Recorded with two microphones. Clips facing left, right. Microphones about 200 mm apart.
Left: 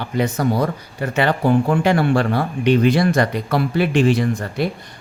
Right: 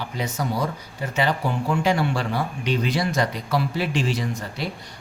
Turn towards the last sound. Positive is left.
turn(degrees=55)  # may be behind; listen again after turning